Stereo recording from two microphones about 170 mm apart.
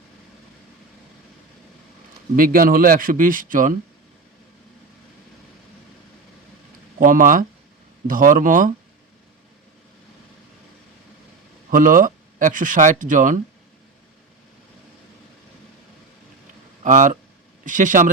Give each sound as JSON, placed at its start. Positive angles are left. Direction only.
{"t": 2.3, "sound": "speech", "side_deg": -55}
{"t": 7.0, "sound": "speech", "side_deg": -50}
{"t": 11.7, "sound": "speech", "side_deg": -55}
{"t": 16.8, "sound": "speech", "side_deg": -50}